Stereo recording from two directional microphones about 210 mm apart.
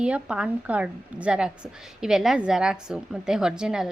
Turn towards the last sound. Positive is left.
turn(degrees=-5)  # may be behind; listen again after turning